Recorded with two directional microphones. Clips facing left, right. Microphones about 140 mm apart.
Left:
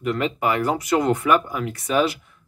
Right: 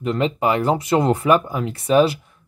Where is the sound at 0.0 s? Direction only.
25° right (ahead or behind).